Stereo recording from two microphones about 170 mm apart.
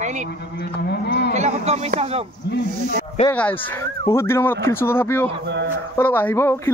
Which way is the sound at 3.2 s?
10° left (ahead or behind).